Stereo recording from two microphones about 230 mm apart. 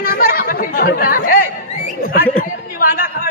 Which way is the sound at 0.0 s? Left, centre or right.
Left.